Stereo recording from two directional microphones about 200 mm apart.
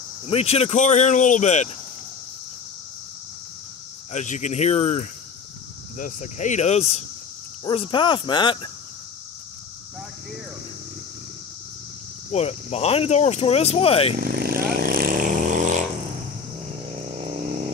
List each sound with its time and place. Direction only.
0.3 s speech: 30° left (ahead or behind)
4.1 s speech: 35° left (ahead or behind)
12.3 s speech: 30° left (ahead or behind)
14.2 s vehicle: 50° right (ahead or behind)